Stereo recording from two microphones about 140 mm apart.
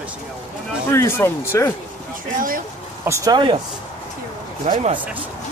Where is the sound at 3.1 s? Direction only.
20° right (ahead or behind).